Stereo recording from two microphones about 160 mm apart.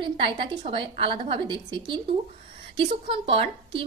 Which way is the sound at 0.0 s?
35° right (ahead or behind).